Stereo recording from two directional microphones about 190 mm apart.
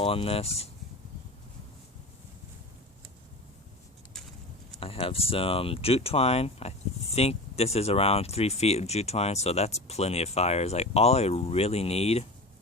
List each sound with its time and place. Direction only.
0.0 s speech: 30° left (ahead or behind)
4.8 s speech: 30° left (ahead or behind)